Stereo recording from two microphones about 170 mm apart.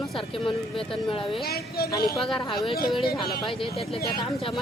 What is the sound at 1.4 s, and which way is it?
Speech, 65° left (ahead or behind).